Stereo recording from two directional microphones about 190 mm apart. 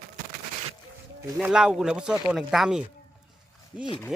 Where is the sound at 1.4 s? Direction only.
5° right (ahead or behind).